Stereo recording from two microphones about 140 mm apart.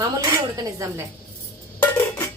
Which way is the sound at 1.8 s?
10° left (ahead or behind).